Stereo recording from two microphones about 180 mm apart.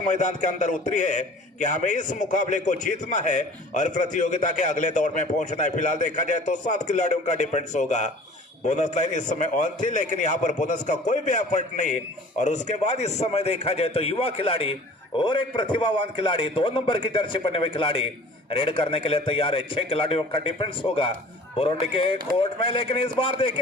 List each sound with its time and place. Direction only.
0.0 s a man's voice: 45° left (ahead or behind)